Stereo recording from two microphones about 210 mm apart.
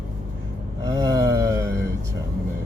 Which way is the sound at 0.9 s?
20° right (ahead or behind).